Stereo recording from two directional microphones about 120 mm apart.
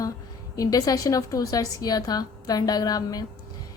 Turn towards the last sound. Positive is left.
turn(degrees=35)  # may be behind; listen again after turning